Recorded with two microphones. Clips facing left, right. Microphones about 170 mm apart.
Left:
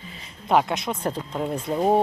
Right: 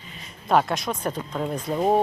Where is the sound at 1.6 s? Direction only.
Centre (ahead or behind).